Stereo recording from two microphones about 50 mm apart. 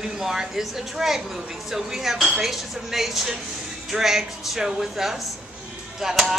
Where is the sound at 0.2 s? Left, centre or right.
Centre.